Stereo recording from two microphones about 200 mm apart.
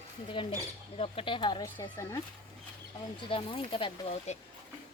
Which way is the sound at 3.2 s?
25° left (ahead or behind).